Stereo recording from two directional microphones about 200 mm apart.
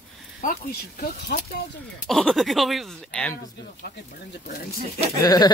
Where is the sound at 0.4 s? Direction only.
45° left (ahead or behind).